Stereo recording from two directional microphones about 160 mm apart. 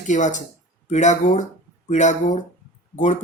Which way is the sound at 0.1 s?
50° left (ahead or behind).